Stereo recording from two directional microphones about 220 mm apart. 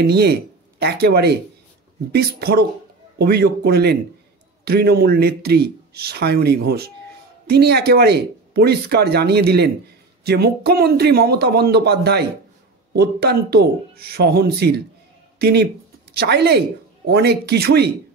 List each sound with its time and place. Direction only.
0.0 s speech: 50° right (ahead or behind)